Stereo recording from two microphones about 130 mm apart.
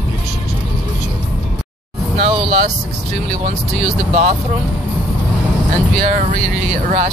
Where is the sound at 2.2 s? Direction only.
60° right (ahead or behind).